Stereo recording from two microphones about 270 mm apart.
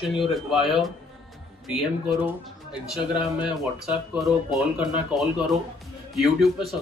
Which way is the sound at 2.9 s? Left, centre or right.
Centre.